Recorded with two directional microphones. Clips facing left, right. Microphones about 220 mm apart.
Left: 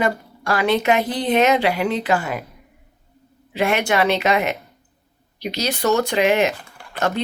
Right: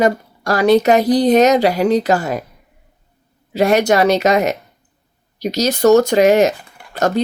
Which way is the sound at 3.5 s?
40° right (ahead or behind).